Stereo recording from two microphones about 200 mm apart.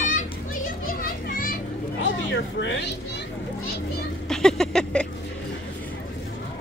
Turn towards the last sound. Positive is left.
turn(degrees=5)  # may be behind; listen again after turning